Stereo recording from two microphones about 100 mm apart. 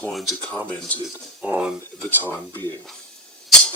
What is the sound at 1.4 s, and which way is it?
Speech, 10° right (ahead or behind).